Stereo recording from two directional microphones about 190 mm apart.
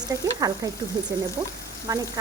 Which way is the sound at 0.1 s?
20° right (ahead or behind).